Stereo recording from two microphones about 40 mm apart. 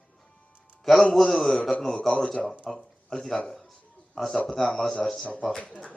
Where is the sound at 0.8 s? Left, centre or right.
Centre.